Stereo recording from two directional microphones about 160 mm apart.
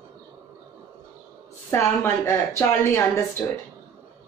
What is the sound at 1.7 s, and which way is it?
Speech, 15° left (ahead or behind).